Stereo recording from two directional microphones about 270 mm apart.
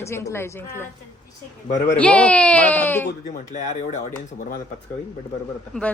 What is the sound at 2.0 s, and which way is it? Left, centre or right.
Speech, centre.